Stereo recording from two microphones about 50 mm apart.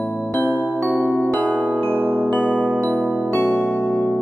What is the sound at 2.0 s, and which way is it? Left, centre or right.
Music, right.